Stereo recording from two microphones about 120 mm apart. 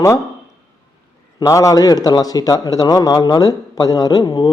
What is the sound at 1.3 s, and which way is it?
A man's voice, 25° left (ahead or behind).